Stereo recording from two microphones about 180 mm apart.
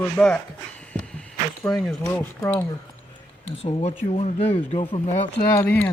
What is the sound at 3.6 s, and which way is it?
Speech, 35° left (ahead or behind).